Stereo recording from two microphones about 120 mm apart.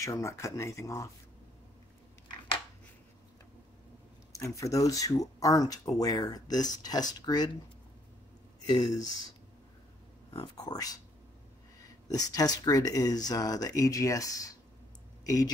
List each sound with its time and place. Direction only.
0.0 s speech: 25° left (ahead or behind)
4.3 s speech: 25° left (ahead or behind)
8.6 s speech: 30° left (ahead or behind)
10.5 s speech: 30° left (ahead or behind)
12.1 s speech: 30° left (ahead or behind)